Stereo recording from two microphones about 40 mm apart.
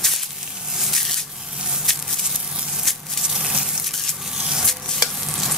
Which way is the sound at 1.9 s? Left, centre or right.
Centre.